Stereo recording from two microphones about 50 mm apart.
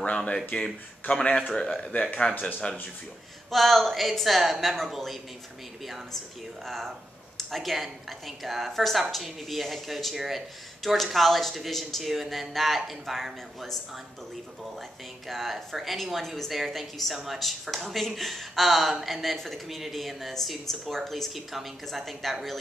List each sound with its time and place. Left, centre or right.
0.0 s a sound: left
1.1 s speech: left
1.6 s speech: left
3.4 s a woman's voice: centre
6.6 s a woman's voice: centre
15.2 s a woman's voice: centre